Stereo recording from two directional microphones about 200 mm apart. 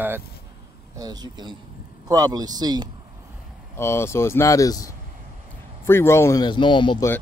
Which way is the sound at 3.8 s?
15° left (ahead or behind).